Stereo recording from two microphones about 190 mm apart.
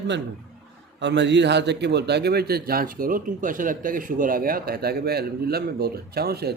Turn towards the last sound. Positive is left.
turn(degrees=-55)  # may be behind; listen again after turning